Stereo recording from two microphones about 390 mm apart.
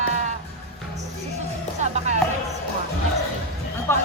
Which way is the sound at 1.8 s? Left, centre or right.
Centre.